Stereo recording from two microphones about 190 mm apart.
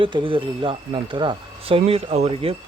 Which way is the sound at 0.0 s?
25° right (ahead or behind).